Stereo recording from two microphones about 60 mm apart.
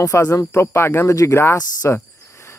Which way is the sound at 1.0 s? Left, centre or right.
Left.